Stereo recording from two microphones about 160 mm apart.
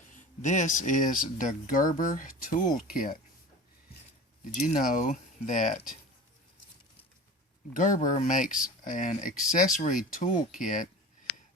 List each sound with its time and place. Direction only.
0.1 s speech: 50° left (ahead or behind)
4.6 s speech: 55° left (ahead or behind)
7.7 s speech: 55° left (ahead or behind)